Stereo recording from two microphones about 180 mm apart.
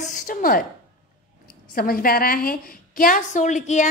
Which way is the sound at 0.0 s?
50° left (ahead or behind).